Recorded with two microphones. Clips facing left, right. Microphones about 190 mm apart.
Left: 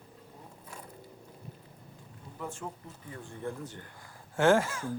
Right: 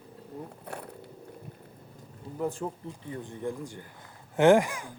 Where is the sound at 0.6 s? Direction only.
65° right (ahead or behind).